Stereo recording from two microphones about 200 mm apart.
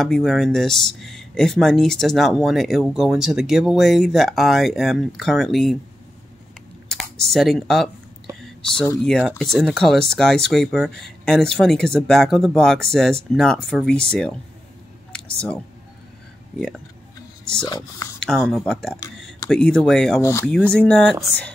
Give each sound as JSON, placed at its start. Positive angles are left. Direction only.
{"t": 0.0, "sound": "speech", "side_deg": 0}
{"t": 6.9, "sound": "speech", "side_deg": 0}
{"t": 8.4, "sound": "a sound", "side_deg": 0}
{"t": 9.0, "sound": "speech", "side_deg": 5}
{"t": 16.5, "sound": "speech", "side_deg": 0}
{"t": 17.6, "sound": "speech", "side_deg": 20}
{"t": 18.2, "sound": "speech", "side_deg": 0}
{"t": 20.2, "sound": "speech", "side_deg": 15}